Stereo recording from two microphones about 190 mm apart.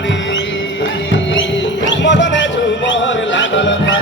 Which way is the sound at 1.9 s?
70° left (ahead or behind).